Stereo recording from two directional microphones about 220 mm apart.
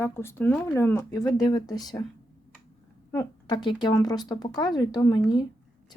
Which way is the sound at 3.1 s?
15° left (ahead or behind).